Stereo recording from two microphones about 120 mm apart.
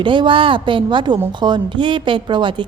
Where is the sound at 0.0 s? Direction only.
40° right (ahead or behind).